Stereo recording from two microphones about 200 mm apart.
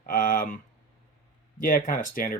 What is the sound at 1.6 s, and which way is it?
Speech, 45° left (ahead or behind).